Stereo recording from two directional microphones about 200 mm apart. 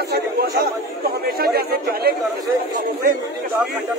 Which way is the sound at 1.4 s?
50° right (ahead or behind).